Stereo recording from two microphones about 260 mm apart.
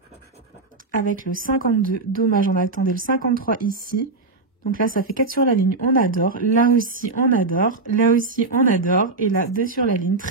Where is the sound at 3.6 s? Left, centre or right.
Right.